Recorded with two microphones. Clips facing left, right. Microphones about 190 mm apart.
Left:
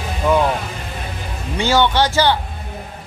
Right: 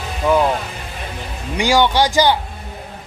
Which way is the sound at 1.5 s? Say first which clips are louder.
Right 1 dB; 10° right (ahead or behind).